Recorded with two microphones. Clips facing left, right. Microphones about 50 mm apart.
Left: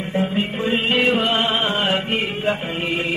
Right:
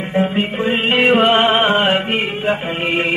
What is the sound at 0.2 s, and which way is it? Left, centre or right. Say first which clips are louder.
Music: right 5 dB; right.